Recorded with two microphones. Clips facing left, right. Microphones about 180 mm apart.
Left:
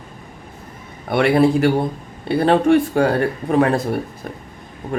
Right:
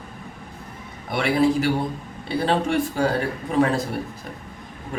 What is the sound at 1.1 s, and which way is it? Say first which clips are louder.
Speech: left 5 dB; 60° left (ahead or behind).